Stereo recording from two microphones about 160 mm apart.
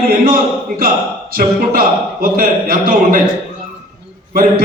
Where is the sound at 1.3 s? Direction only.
60° right (ahead or behind).